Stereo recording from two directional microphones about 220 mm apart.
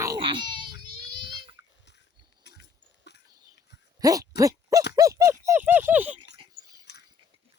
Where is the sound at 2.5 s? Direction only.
50° left (ahead or behind).